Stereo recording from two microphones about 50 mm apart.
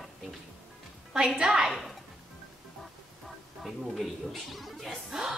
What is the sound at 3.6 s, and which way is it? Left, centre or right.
Speech, centre.